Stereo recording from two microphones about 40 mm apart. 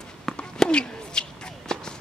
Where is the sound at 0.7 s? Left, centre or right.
Left.